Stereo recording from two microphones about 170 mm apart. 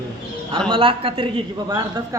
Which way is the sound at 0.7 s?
30° right (ahead or behind).